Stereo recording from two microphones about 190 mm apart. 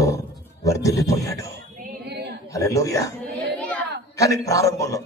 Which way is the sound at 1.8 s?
60° right (ahead or behind).